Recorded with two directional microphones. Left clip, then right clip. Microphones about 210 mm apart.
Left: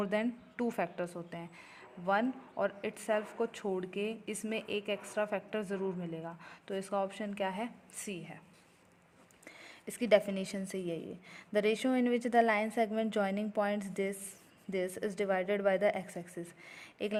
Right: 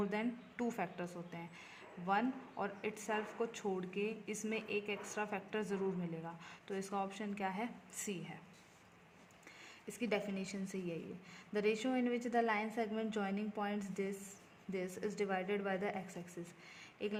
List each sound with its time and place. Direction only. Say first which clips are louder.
0.0 s speech: left 6 dB; 30° left (ahead or behind)
9.8 s a woman's voice: left 11 dB; 35° left (ahead or behind)